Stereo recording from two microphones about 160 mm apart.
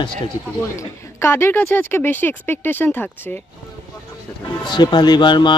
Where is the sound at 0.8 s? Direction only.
15° left (ahead or behind).